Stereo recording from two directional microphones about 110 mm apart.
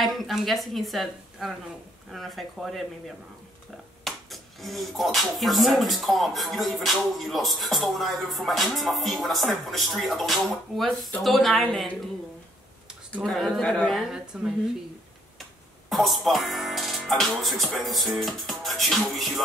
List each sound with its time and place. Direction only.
0.0 s a woman's voice: centre (ahead or behind)
2.1 s music: centre (ahead or behind)
4.0 s music: centre (ahead or behind)
13.1 s music: 5° left (ahead or behind)
14.1 s music: 5° right (ahead or behind)
15.9 s music: centre (ahead or behind)